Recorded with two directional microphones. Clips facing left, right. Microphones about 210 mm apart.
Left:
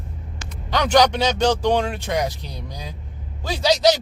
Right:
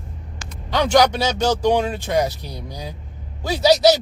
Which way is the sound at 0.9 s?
10° right (ahead or behind).